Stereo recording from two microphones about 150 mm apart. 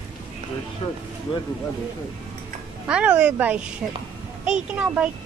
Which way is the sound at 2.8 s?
10° right (ahead or behind).